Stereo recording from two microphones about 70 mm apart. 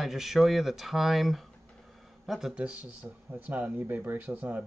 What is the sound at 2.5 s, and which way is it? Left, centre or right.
Speech, centre.